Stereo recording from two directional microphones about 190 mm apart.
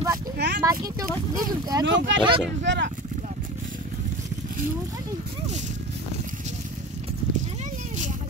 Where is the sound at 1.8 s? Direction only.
70° right (ahead or behind).